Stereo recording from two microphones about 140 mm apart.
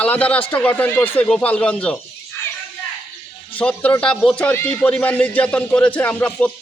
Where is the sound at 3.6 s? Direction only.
10° left (ahead or behind).